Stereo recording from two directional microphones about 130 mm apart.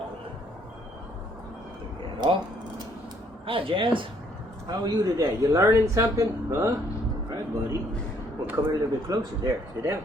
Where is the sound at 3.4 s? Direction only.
45° right (ahead or behind).